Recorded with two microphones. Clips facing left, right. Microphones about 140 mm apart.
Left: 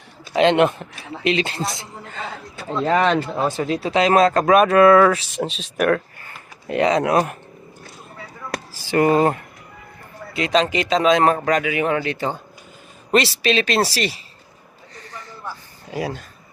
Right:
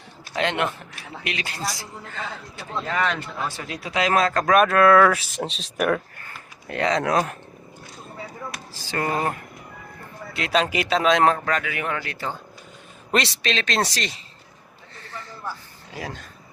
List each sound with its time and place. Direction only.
0.3 s a man's voice: 20° left (ahead or behind)
2.8 s a man's voice: 35° left (ahead or behind)
4.6 s speech: 5° left (ahead or behind)
6.7 s speech: 15° left (ahead or behind)
8.7 s a sound: 15° left (ahead or behind)
10.3 s speech: 5° right (ahead or behind)
11.3 s a man's voice: 20° left (ahead or behind)
13.1 s speech: centre (ahead or behind)
15.9 s speech: 15° left (ahead or behind)